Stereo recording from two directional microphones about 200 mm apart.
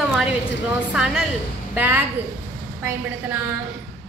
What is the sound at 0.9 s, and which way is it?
A woman's voice, 5° right (ahead or behind).